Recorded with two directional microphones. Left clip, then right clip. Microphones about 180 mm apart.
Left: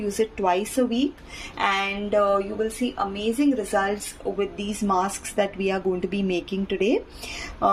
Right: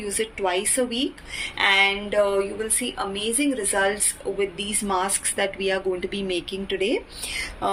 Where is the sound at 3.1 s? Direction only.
60° left (ahead or behind).